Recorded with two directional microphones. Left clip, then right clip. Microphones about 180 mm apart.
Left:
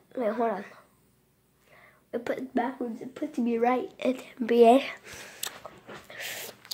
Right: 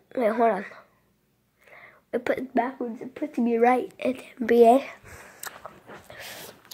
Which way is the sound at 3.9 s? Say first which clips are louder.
Right 1 dB; 5° right (ahead or behind).